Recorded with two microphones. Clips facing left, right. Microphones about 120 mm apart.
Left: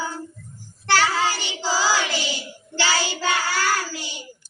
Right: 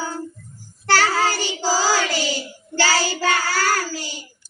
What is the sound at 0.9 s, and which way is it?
Child singing, 40° right (ahead or behind).